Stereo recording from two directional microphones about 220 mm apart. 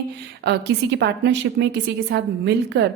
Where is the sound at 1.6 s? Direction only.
50° right (ahead or behind).